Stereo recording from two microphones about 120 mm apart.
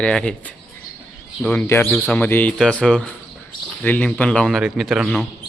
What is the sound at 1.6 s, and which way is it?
A man's voice, 20° left (ahead or behind).